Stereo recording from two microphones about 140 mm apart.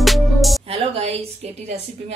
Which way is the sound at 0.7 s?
45° right (ahead or behind).